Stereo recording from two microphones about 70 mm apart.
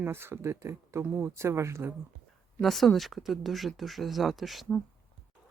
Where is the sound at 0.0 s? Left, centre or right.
Right.